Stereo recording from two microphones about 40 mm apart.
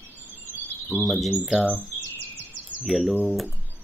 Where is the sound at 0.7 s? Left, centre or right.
Left.